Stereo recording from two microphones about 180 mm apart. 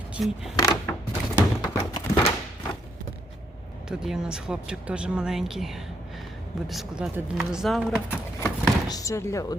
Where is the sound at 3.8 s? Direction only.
5° right (ahead or behind).